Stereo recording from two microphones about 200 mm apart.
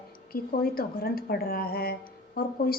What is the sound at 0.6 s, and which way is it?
A woman's voice, 50° left (ahead or behind).